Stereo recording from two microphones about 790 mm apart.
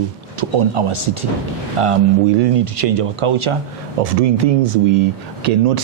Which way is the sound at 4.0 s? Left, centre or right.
Right.